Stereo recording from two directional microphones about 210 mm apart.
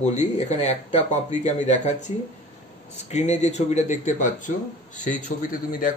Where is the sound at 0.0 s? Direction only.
35° left (ahead or behind).